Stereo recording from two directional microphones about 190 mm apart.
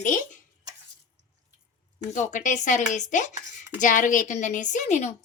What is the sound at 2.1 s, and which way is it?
A woman's voice, 40° left (ahead or behind).